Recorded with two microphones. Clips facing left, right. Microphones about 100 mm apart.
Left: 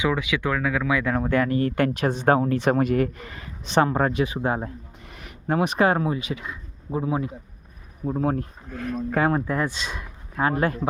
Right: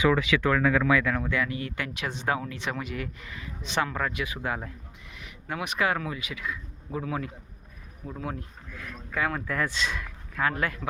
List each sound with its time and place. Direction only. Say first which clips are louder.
0.0 s speech: right 1 dB; 15° left (ahead or behind)
0.9 s speech: even; 20° left (ahead or behind)
1.1 s speech: left 7 dB; 40° left (ahead or behind)
5.0 s speech: left 10 dB; 45° left (ahead or behind); by 7.3 s 25° left (ahead or behind)
8.0 s speech: left 11 dB; 40° left (ahead or behind)